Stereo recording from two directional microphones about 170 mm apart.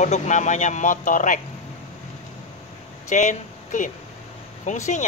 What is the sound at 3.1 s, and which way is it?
Speech, 45° left (ahead or behind).